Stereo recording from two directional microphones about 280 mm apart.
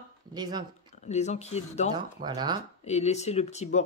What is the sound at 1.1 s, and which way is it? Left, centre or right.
Speech, left.